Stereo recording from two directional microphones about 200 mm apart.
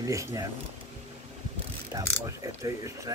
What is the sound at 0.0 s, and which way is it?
Speech, 15° right (ahead or behind).